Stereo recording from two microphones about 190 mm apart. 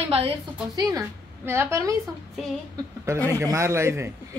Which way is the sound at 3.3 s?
15° right (ahead or behind).